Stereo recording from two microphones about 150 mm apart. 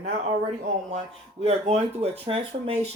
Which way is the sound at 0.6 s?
50° right (ahead or behind).